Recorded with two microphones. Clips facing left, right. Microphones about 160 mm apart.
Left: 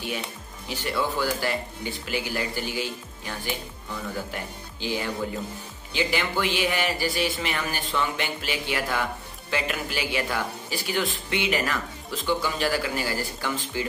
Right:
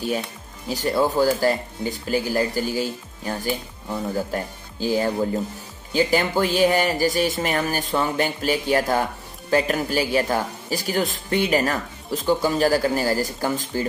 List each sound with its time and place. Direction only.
0.7 s speech: 40° right (ahead or behind)